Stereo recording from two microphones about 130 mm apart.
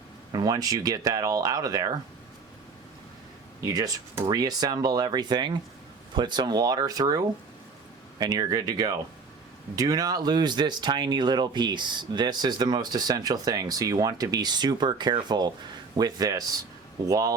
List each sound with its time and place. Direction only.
0.3 s speech: 30° right (ahead or behind)
3.6 s speech: 30° right (ahead or behind)
8.2 s speech: 30° right (ahead or behind)